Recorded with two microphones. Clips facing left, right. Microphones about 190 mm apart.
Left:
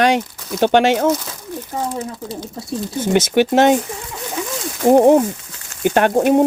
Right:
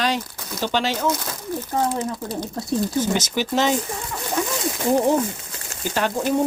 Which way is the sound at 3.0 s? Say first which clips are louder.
Left 7 dB; 60° left (ahead or behind).